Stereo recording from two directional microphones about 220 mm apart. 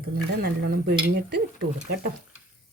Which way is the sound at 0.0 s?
45° right (ahead or behind).